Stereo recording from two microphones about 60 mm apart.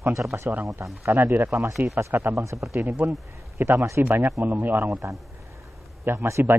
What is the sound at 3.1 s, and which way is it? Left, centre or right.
Speech, right.